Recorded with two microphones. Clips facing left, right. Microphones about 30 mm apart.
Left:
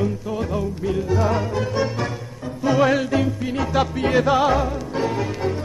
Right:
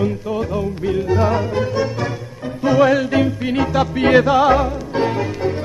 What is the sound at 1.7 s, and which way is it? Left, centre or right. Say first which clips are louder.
Music: right 2 dB; centre.